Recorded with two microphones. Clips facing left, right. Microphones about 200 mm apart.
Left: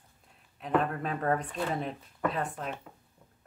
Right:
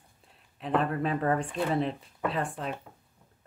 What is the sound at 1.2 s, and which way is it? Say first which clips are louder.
Speech: right 2 dB; 30° right (ahead or behind).